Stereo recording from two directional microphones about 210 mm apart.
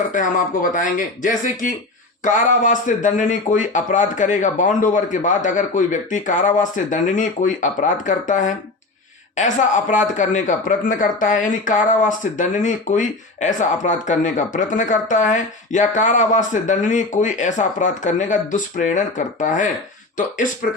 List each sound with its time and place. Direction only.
0.1 s speech: 40° left (ahead or behind)